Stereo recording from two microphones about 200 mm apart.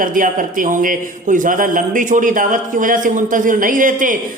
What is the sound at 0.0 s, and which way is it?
Speech, 45° right (ahead or behind).